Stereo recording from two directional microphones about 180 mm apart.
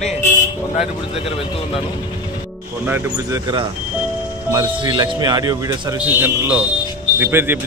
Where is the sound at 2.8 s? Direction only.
10° right (ahead or behind).